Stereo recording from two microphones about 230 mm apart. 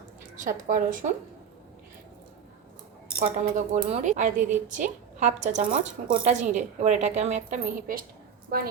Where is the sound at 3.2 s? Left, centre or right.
Right.